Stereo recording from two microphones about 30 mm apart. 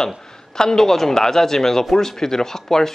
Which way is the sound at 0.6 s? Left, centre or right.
Centre.